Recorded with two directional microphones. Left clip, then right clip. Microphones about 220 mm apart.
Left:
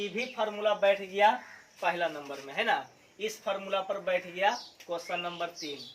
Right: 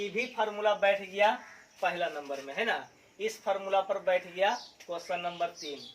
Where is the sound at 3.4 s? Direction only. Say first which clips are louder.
Right 3 dB; 20° left (ahead or behind).